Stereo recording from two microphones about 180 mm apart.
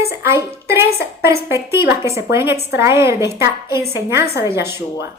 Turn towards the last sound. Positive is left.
turn(degrees=-15)  # may be behind; listen again after turning